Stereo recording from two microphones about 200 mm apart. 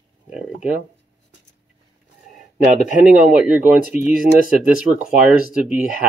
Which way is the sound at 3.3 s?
5° right (ahead or behind).